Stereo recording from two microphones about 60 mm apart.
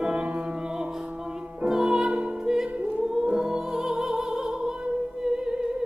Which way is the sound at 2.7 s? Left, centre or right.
Right.